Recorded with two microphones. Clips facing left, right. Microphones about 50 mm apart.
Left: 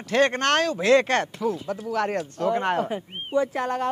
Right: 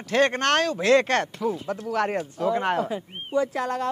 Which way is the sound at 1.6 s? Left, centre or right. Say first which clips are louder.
Even; right.